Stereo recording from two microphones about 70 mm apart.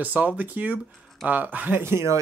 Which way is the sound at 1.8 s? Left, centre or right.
Right.